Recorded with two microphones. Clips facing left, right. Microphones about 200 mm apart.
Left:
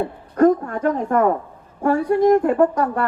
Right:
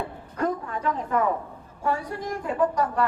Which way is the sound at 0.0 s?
50° left (ahead or behind).